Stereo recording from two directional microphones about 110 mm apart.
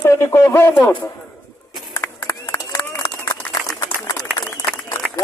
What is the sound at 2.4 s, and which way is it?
Run, 20° left (ahead or behind).